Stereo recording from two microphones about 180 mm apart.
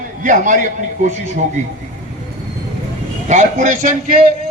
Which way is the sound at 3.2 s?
40° right (ahead or behind).